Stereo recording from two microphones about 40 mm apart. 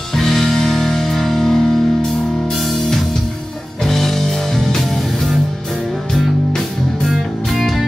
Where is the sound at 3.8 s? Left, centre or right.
Centre.